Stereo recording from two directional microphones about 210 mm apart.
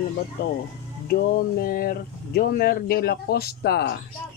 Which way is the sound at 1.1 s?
45° left (ahead or behind).